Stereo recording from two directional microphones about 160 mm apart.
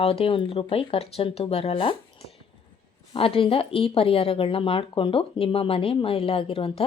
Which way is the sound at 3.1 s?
35° left (ahead or behind).